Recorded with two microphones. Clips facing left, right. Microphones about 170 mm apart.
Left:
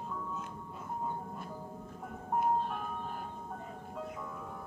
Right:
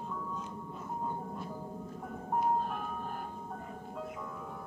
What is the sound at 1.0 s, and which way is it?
Music, centre (ahead or behind).